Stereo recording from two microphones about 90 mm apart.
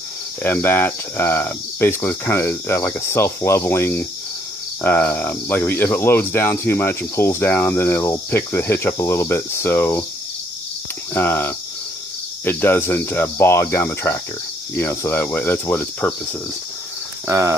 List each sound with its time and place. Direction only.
0.4 s speech: 25° left (ahead or behind)
11.1 s speech: 25° left (ahead or behind)
17.3 s speech: 35° right (ahead or behind)